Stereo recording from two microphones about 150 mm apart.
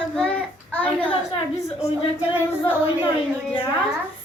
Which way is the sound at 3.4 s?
10° left (ahead or behind).